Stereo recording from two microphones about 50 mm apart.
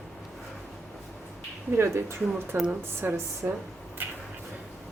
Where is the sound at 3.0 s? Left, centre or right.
Right.